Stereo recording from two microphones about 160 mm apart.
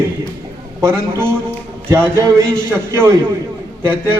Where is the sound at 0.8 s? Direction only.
15° right (ahead or behind).